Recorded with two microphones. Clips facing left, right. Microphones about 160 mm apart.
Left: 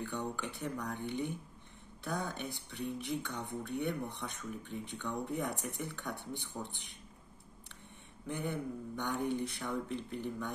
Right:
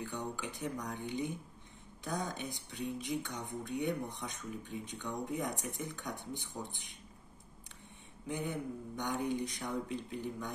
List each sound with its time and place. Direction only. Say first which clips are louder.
0.0 s speech: left 2 dB; 15° right (ahead or behind)
8.3 s speech: even; 15° right (ahead or behind)